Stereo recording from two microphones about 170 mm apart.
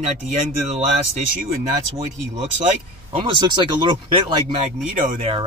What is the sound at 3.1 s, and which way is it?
Speech, 30° right (ahead or behind).